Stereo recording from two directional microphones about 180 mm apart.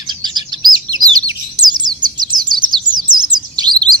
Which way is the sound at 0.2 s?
25° right (ahead or behind).